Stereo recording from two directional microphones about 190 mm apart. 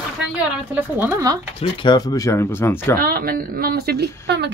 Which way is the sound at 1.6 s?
25° left (ahead or behind).